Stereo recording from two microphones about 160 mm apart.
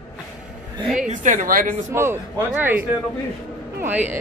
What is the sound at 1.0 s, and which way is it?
Speech, 55° right (ahead or behind).